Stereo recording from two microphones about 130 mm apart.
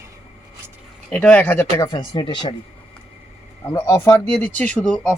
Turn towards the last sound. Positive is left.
turn(degrees=5)  # may be behind; listen again after turning